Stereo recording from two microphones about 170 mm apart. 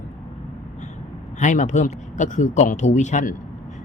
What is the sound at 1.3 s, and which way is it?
Speech, 45° left (ahead or behind).